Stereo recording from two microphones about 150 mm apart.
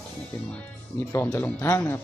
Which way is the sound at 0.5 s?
15° left (ahead or behind).